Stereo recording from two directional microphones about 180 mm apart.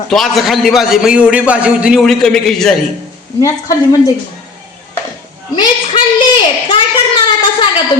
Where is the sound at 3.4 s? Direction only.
20° left (ahead or behind).